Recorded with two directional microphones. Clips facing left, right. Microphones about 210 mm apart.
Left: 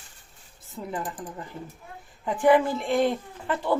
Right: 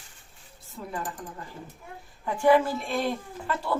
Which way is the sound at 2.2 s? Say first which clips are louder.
Left 1 dB; 20° left (ahead or behind).